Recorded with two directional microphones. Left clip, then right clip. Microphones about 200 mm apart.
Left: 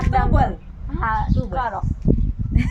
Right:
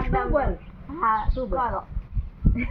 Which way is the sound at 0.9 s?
15° left (ahead or behind).